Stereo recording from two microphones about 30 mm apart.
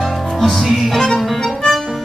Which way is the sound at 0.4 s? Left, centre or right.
Centre.